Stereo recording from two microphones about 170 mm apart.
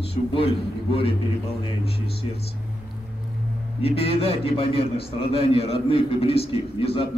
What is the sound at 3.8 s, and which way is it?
A man's voice, 35° left (ahead or behind).